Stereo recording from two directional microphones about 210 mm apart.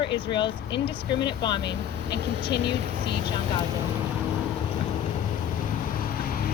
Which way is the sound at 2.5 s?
55° left (ahead or behind).